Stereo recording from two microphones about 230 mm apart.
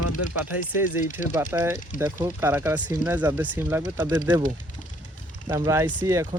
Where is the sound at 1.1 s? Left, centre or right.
Centre.